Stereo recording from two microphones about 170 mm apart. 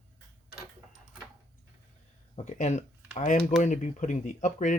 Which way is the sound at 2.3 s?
45° left (ahead or behind).